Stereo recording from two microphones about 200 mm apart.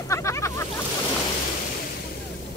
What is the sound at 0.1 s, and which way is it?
Boat, 15° left (ahead or behind).